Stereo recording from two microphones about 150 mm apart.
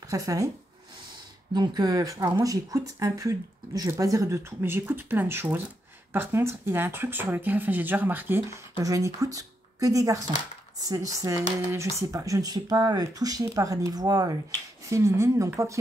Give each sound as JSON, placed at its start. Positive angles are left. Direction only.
{"t": 0.1, "sound": "speech", "side_deg": -20}
{"t": 1.5, "sound": "speech", "side_deg": -30}